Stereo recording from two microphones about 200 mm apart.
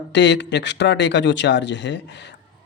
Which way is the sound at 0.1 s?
60° left (ahead or behind).